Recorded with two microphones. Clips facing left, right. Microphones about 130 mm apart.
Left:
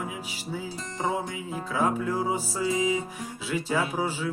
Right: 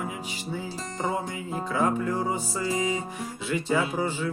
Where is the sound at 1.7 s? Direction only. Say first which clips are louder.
Even; 5° left (ahead or behind).